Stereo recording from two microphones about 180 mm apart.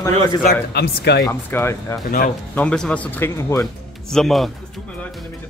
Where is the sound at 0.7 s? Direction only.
65° left (ahead or behind).